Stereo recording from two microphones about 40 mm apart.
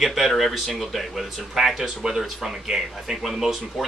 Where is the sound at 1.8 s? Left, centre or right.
Centre.